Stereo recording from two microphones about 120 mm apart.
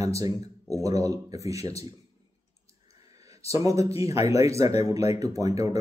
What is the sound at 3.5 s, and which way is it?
Speech, 30° right (ahead or behind).